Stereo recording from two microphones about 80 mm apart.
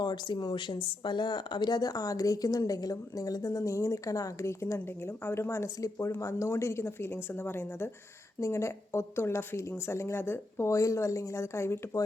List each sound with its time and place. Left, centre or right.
0.0 s speech: left
0.9 s speech: left